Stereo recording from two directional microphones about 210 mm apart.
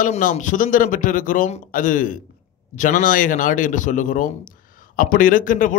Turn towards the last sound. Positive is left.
turn(degrees=40)  # may be behind; listen again after turning